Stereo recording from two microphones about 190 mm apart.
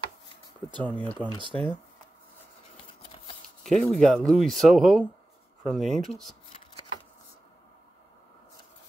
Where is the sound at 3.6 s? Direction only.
Centre (ahead or behind).